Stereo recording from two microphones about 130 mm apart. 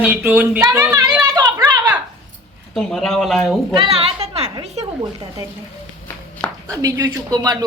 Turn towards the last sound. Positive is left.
turn(degrees=-30)  # may be behind; listen again after turning